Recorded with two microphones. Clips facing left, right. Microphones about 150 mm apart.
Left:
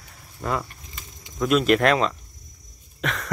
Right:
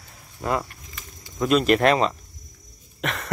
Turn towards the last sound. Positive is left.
turn(degrees=0)  # may be behind; listen again after turning